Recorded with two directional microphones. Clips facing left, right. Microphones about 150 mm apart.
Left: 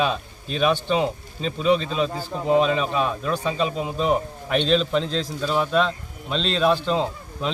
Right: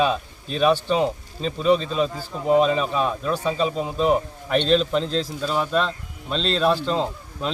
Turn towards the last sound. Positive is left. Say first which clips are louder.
# even
turn(degrees=0)  # may be behind; listen again after turning